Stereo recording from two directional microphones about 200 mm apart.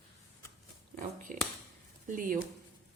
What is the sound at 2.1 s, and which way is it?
Speech, 40° right (ahead or behind).